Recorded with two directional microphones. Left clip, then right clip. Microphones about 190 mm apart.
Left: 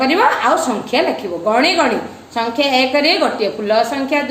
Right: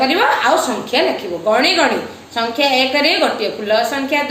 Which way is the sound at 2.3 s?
50° left (ahead or behind).